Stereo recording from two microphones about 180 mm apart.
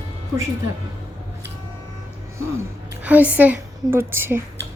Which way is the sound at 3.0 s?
10° right (ahead or behind).